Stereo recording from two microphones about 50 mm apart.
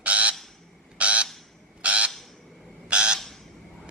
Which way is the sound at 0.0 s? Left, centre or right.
Right.